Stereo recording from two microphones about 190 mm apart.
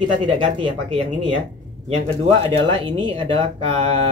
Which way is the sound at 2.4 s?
30° right (ahead or behind).